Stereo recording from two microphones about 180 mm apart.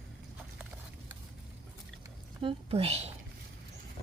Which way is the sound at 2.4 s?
30° right (ahead or behind).